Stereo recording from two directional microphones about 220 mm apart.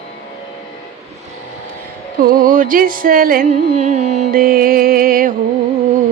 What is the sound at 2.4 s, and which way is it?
Music, 35° right (ahead or behind).